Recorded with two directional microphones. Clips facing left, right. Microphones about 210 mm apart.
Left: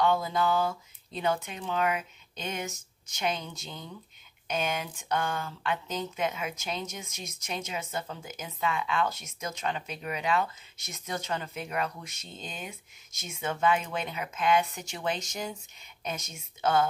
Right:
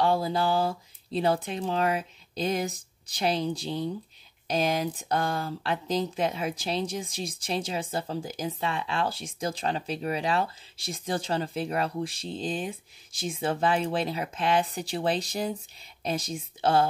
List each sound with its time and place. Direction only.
0.0 s speech: 30° right (ahead or behind)